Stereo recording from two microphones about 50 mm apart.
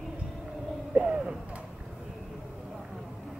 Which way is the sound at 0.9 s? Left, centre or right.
Centre.